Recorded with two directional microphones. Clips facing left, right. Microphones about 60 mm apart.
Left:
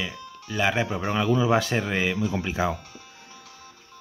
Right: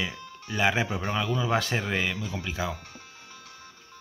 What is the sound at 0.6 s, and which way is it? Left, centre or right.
Speech, centre.